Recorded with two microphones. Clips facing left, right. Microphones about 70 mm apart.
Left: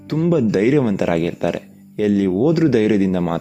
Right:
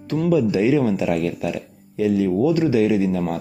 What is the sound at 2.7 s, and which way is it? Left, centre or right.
Speech, left.